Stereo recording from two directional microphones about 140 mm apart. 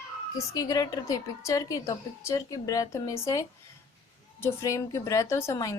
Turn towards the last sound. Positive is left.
turn(degrees=20)  # may be behind; listen again after turning